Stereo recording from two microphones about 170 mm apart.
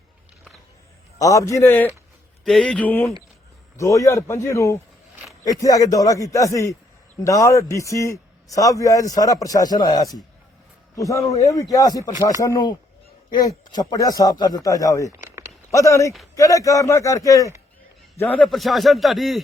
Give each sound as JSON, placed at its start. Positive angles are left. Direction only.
{"t": 1.2, "sound": "a man's voice", "side_deg": 20}
{"t": 2.4, "sound": "a man's voice", "side_deg": 5}
{"t": 15.1, "sound": "a sound", "side_deg": -15}
{"t": 15.7, "sound": "a man's voice", "side_deg": 20}
{"t": 18.4, "sound": "speech", "side_deg": 0}